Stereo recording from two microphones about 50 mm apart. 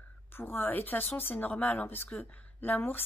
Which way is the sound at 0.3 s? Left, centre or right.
Left.